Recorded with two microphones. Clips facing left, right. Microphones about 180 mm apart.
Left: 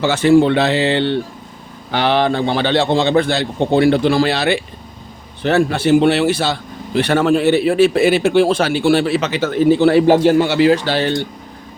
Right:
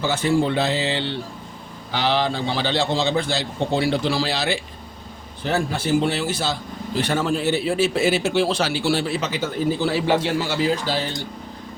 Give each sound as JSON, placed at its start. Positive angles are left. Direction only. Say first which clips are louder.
{"t": 0.0, "sound": "a man's voice", "louder": "left 9 dB", "side_deg": 75}
{"t": 10.1, "sound": "a man's voice", "louder": "left 9 dB", "side_deg": 50}